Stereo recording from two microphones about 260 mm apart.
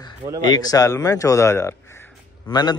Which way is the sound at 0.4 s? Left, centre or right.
Centre.